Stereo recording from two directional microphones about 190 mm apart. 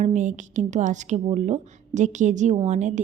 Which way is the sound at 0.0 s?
40° right (ahead or behind).